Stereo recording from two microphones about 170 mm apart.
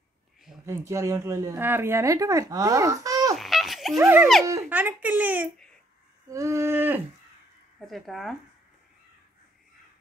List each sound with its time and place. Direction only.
0.7 s speech: 15° right (ahead or behind)
3.3 s a sound: centre (ahead or behind)
4.0 s speech: 15° right (ahead or behind)
7.8 s speech: centre (ahead or behind)